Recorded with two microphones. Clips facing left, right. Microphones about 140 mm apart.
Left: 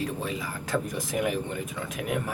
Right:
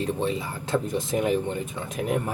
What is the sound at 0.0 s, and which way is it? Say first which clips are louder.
Speech: right 5 dB; 30° right (ahead or behind).